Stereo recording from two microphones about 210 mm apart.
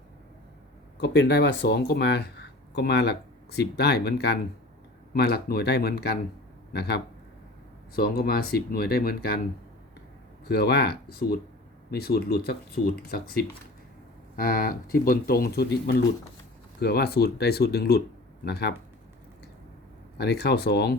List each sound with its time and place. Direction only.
0.9 s speech: 55° left (ahead or behind)
20.1 s speech: 50° left (ahead or behind)